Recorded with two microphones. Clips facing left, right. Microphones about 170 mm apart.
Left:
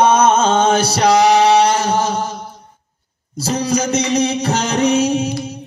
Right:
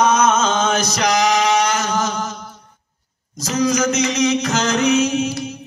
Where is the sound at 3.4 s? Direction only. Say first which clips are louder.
Even; 30° left (ahead or behind).